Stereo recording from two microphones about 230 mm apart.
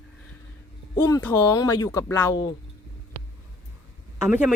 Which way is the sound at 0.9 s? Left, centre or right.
Centre.